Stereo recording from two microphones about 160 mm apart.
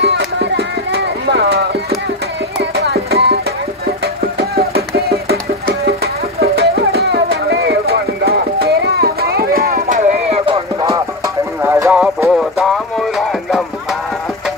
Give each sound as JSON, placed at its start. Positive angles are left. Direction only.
{"t": 0.0, "sound": "music", "side_deg": -85}
{"t": 2.7, "sound": "music", "side_deg": -85}
{"t": 4.6, "sound": "music", "side_deg": -75}
{"t": 6.4, "sound": "music", "side_deg": -80}
{"t": 11.6, "sound": "a sound", "side_deg": -15}
{"t": 11.9, "sound": "music", "side_deg": 0}